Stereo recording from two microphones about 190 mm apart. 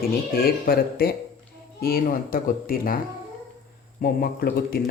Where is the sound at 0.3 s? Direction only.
50° left (ahead or behind).